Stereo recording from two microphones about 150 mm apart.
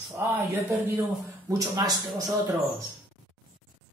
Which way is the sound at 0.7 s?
20° right (ahead or behind).